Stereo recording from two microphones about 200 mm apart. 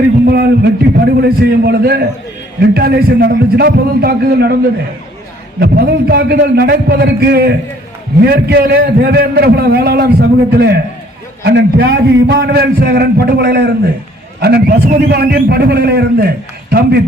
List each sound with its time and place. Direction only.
0.3 s a man's voice: 50° right (ahead or behind)
5.5 s a man's voice: 55° right (ahead or behind)